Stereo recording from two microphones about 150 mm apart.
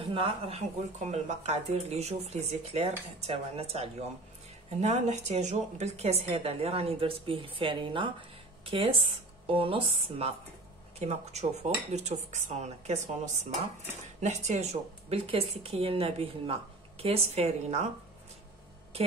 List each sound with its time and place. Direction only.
0.0 s a woman's voice: 35° right (ahead or behind)